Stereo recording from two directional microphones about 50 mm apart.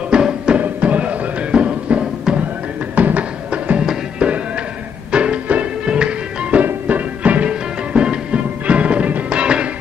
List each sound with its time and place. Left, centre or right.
0.1 s music: centre
0.6 s music: right
3.0 s music: right